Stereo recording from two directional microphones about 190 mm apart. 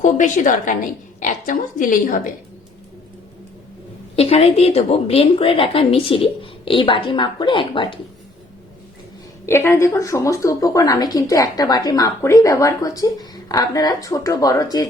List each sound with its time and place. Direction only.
0.0 s a woman's voice: 40° left (ahead or behind)
4.1 s a woman's voice: 30° left (ahead or behind)
9.5 s speech: 15° left (ahead or behind)